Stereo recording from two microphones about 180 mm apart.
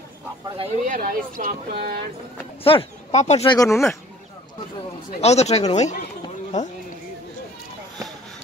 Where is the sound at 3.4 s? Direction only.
20° left (ahead or behind).